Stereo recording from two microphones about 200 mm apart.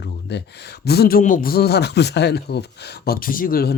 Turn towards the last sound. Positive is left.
turn(degrees=45)  # may be behind; listen again after turning